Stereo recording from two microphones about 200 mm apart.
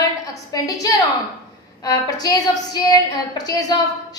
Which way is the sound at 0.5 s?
15° left (ahead or behind).